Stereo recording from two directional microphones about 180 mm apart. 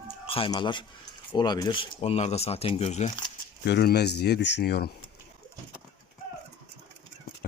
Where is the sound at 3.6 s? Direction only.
65° left (ahead or behind).